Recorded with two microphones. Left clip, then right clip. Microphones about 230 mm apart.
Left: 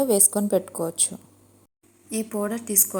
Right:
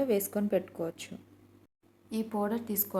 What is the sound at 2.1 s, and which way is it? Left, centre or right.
Speech, centre.